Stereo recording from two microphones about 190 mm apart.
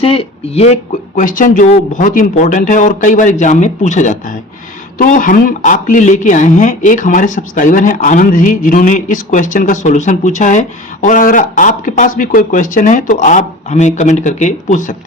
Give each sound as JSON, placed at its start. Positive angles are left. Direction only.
{"t": 0.0, "sound": "a woman's voice", "side_deg": 30}